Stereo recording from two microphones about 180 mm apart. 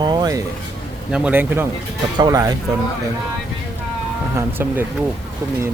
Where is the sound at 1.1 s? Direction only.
10° right (ahead or behind).